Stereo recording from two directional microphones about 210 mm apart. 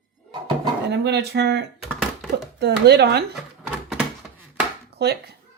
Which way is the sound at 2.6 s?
50° right (ahead or behind).